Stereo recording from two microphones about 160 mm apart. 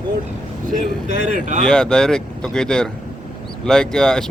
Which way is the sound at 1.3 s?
55° right (ahead or behind).